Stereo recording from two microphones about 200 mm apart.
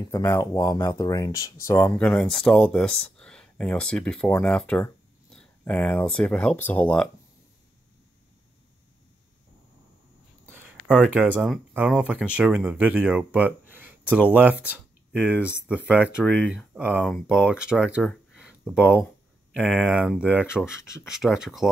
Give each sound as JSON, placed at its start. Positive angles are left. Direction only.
{"t": 0.1, "sound": "speech", "side_deg": 15}
{"t": 10.4, "sound": "speech", "side_deg": -10}